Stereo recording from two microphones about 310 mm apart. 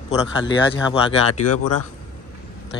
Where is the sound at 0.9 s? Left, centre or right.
Centre.